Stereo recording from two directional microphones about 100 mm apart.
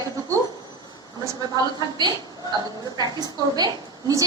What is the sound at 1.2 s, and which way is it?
A woman's voice, 45° right (ahead or behind).